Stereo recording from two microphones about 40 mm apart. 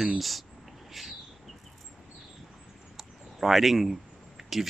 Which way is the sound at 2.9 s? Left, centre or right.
Centre.